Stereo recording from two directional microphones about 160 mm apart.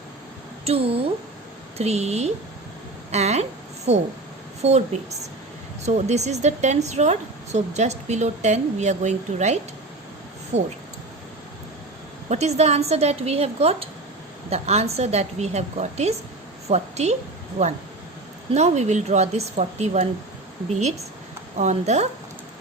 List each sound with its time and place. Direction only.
0.6 s a woman's voice: 40° right (ahead or behind)
5.8 s a woman's voice: 45° right (ahead or behind)
12.3 s a woman's voice: 45° right (ahead or behind)
18.5 s a woman's voice: 45° right (ahead or behind)